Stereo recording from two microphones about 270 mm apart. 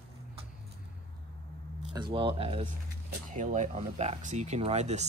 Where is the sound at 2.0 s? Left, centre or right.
Centre.